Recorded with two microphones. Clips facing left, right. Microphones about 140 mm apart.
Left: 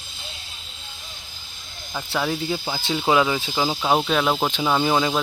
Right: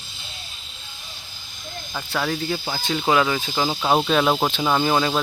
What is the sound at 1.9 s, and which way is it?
Speech, 5° left (ahead or behind).